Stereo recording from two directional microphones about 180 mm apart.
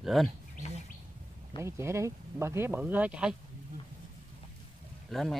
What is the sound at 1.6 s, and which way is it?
Speech, 15° right (ahead or behind).